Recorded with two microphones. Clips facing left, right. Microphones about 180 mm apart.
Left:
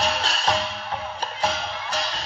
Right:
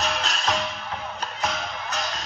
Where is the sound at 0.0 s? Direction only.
30° left (ahead or behind).